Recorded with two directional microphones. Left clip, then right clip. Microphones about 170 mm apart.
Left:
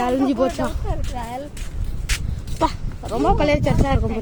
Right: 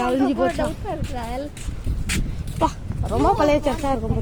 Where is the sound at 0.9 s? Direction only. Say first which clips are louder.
Right 1 dB; 70° right (ahead or behind).